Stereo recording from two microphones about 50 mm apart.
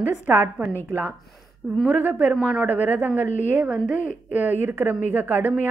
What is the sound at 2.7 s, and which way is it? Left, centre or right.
A woman's voice, right.